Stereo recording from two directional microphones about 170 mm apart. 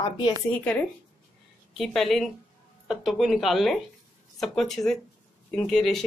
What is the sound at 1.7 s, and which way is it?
Speech, centre (ahead or behind).